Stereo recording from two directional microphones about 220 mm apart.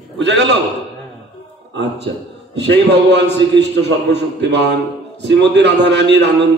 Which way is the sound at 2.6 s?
50° right (ahead or behind).